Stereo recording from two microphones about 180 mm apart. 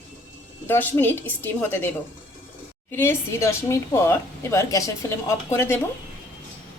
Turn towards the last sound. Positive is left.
turn(degrees=15)  # may be behind; listen again after turning